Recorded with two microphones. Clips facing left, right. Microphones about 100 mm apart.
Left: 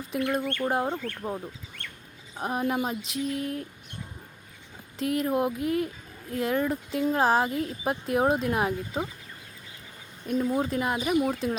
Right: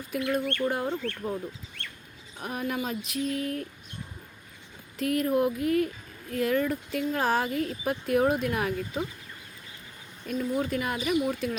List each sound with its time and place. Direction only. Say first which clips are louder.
0.1 s speech: even; 25° left (ahead or behind)
2.4 s speech: left 4 dB; 25° left (ahead or behind)
4.9 s speech: right 1 dB; 25° left (ahead or behind)
10.2 s speech: left 2 dB; 30° left (ahead or behind)